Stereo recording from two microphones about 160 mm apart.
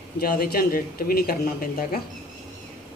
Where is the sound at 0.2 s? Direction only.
70° left (ahead or behind).